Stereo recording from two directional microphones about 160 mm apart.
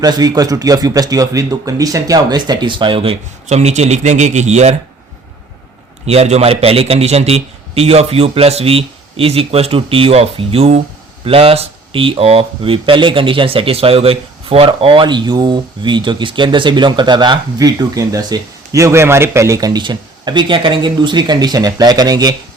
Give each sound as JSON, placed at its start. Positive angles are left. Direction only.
{"t": 0.0, "sound": "speech", "side_deg": -25}
{"t": 6.1, "sound": "a man's voice", "side_deg": -40}